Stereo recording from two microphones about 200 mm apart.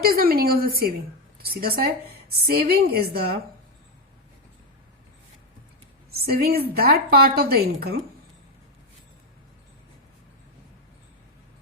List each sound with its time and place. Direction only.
0.0 s a woman's voice: 50° right (ahead or behind)
6.1 s a woman's voice: 50° right (ahead or behind)